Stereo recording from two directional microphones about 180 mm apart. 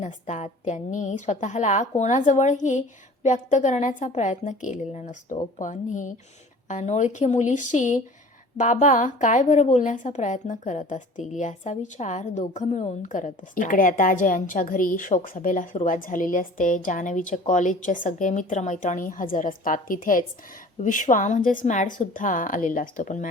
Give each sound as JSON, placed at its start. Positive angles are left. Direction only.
{"t": 0.0, "sound": "a woman's voice", "side_deg": 40}